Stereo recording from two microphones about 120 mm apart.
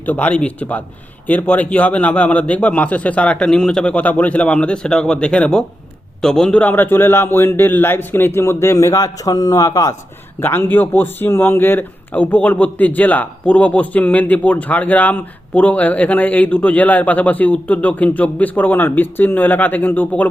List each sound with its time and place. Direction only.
0.0 s a man's voice: 15° left (ahead or behind); by 9.9 s 30° left (ahead or behind)
10.4 s speech: 20° left (ahead or behind)